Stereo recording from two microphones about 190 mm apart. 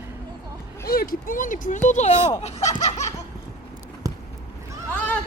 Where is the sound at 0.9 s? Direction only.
50° left (ahead or behind).